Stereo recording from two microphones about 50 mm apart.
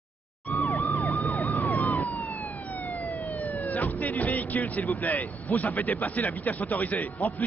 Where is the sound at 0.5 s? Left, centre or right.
Left.